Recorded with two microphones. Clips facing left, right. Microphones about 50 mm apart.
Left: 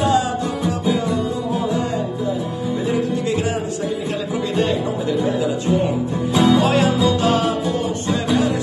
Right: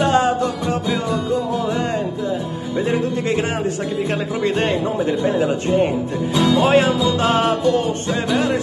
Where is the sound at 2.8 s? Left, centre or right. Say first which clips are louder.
Right 2 dB; right.